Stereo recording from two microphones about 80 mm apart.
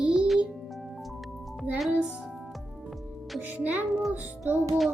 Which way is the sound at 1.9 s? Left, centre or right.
Centre.